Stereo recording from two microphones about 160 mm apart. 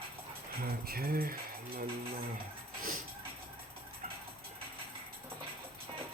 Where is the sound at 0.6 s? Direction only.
70° right (ahead or behind).